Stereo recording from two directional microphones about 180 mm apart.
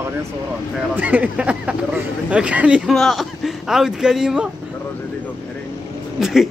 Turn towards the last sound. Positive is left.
turn(degrees=0)  # may be behind; listen again after turning